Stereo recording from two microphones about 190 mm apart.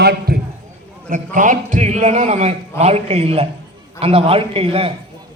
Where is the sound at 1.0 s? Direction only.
45° right (ahead or behind).